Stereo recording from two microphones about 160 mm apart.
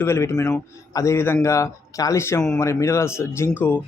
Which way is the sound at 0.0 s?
15° left (ahead or behind).